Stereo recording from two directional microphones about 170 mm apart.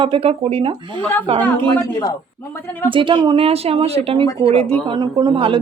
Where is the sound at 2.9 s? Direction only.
30° right (ahead or behind).